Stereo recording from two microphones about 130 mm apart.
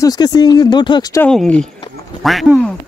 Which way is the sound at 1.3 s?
5° left (ahead or behind).